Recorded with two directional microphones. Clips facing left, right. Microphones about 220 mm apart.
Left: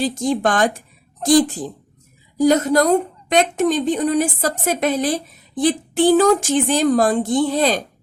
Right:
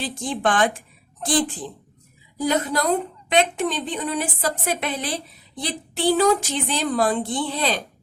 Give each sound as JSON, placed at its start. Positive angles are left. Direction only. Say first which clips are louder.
{"t": 0.0, "sound": "a woman's voice", "louder": "left 6 dB", "side_deg": 40}